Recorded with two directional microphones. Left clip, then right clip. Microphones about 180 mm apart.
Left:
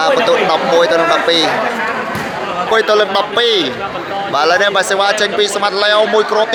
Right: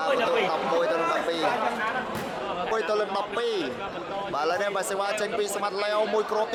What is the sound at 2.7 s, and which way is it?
A man's voice, centre (ahead or behind).